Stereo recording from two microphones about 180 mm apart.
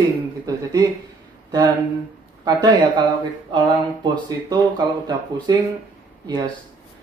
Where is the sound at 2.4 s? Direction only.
25° right (ahead or behind).